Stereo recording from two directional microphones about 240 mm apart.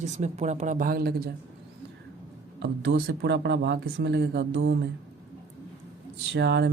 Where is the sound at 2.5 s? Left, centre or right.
Right.